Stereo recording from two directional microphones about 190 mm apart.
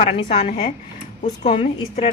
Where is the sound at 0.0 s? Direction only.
30° left (ahead or behind).